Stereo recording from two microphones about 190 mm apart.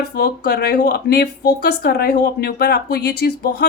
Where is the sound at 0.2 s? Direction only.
55° left (ahead or behind).